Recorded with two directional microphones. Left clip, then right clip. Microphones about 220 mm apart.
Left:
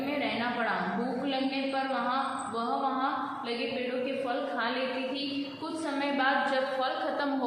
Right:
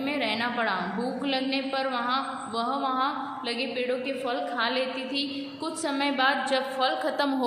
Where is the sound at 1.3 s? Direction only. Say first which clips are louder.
Right 5 dB; 50° right (ahead or behind).